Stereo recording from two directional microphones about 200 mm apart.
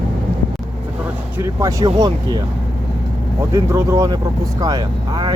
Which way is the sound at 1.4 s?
15° right (ahead or behind).